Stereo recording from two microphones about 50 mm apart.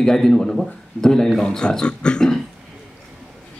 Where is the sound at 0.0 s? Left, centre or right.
Centre.